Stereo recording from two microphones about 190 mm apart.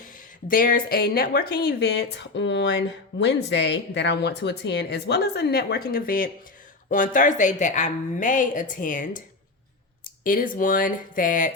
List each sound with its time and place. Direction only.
0.4 s a woman's voice: 45° left (ahead or behind)
10.2 s a woman's voice: 45° left (ahead or behind)